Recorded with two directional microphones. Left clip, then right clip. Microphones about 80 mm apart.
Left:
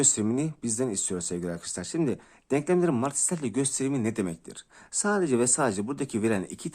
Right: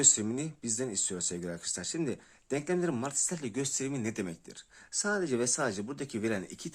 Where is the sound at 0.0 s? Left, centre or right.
Left.